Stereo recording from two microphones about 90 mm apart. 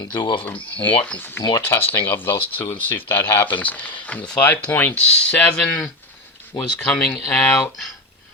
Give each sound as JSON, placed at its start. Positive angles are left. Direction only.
{"t": 0.1, "sound": "speech", "side_deg": 60}
{"t": 1.0, "sound": "speech", "side_deg": 20}